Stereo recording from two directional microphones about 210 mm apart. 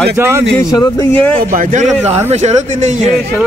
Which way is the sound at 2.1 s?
30° right (ahead or behind).